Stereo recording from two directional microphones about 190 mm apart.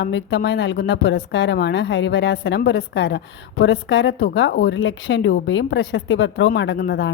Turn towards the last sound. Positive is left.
turn(degrees=65)  # may be behind; listen again after turning